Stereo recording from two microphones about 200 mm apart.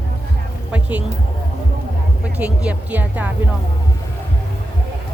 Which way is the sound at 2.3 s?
5° right (ahead or behind).